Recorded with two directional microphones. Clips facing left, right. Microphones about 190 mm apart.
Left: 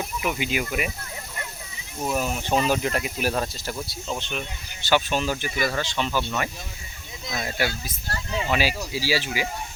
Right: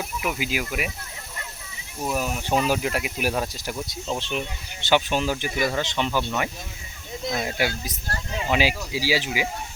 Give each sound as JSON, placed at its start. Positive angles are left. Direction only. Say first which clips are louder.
{"t": 0.0, "sound": "speech", "louder": "left 1 dB", "side_deg": -5}
{"t": 2.0, "sound": "speech", "louder": "left 1 dB", "side_deg": 0}
{"t": 4.2, "sound": "speech", "louder": "right 3 dB", "side_deg": -25}